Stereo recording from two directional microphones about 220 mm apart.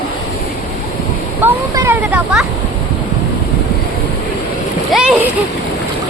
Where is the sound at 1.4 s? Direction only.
10° right (ahead or behind).